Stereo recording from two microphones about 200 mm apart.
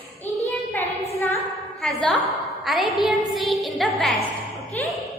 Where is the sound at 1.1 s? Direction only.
10° left (ahead or behind).